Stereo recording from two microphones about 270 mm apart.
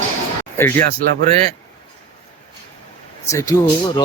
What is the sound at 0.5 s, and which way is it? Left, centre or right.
Speech, centre.